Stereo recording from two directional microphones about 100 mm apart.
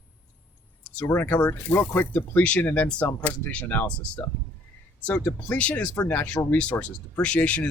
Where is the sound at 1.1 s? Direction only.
20° left (ahead or behind).